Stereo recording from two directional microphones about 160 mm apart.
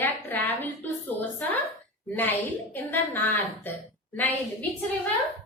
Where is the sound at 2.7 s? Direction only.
10° left (ahead or behind).